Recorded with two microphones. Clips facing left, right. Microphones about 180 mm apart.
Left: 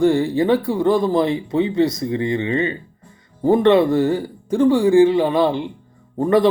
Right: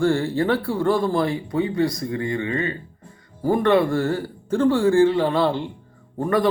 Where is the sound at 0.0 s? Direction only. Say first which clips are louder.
Left 4 dB; 15° left (ahead or behind).